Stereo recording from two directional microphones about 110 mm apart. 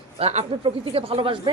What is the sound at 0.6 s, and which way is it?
Speech, 55° right (ahead or behind).